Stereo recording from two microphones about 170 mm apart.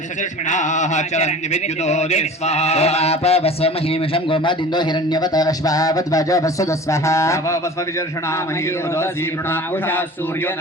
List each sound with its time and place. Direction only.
0.5 s speech: 45° left (ahead or behind)
1.8 s mantra: 40° left (ahead or behind); by 7.6 s 15° left (ahead or behind)